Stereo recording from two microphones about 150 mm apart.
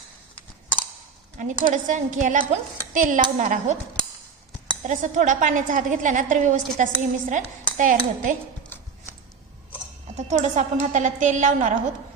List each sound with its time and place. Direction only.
1.4 s a woman's voice: 55° right (ahead or behind)
4.8 s a woman's voice: 55° right (ahead or behind)
10.2 s a woman's voice: 50° right (ahead or behind)